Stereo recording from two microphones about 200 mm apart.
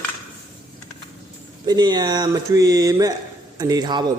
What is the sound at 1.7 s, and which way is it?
Speech, 20° right (ahead or behind).